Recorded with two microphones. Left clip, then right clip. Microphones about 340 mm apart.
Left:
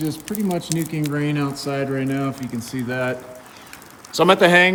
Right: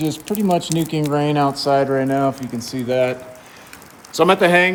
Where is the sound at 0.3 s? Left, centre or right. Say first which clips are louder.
Right 6 dB; centre.